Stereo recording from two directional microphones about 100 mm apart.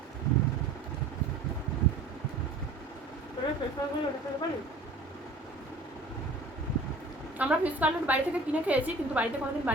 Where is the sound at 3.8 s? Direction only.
40° left (ahead or behind).